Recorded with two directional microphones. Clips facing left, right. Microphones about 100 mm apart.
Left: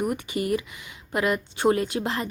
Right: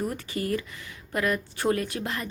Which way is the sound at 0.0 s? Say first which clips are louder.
Left 4 dB; 15° left (ahead or behind).